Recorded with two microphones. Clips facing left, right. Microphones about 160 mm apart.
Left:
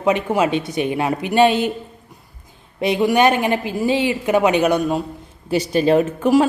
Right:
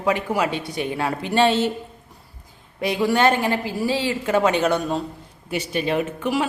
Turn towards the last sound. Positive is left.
turn(degrees=40)  # may be behind; listen again after turning